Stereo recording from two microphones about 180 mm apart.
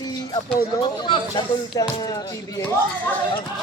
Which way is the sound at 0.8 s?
25° left (ahead or behind).